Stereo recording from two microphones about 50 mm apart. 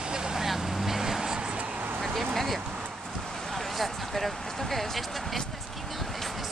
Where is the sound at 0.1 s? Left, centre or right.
Centre.